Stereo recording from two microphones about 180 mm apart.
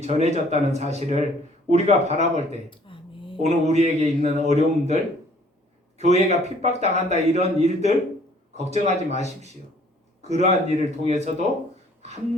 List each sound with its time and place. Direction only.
0.0 s a man's voice: 40° right (ahead or behind)
2.6 s a sound: 30° left (ahead or behind)
3.3 s a man's voice: 35° right (ahead or behind)
6.0 s a man's voice: 40° right (ahead or behind)